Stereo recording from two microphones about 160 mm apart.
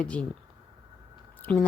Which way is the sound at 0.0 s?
5° left (ahead or behind).